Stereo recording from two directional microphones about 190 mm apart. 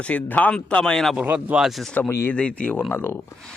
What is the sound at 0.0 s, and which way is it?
Speech, 5° left (ahead or behind).